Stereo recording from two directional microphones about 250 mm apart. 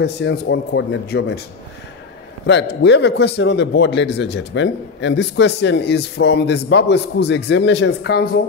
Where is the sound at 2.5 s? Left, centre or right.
Left.